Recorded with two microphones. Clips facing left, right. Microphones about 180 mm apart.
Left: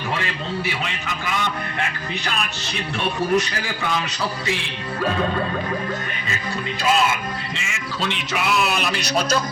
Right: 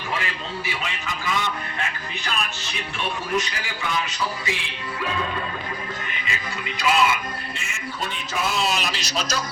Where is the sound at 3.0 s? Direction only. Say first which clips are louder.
Left 5 dB; 65° left (ahead or behind).